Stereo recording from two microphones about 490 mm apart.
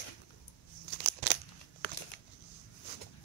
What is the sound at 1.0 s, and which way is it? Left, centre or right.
Tearing, left.